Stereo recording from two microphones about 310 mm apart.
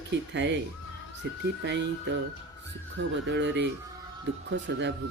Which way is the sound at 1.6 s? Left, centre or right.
Right.